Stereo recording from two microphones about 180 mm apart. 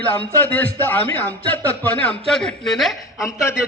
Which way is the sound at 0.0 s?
10° left (ahead or behind).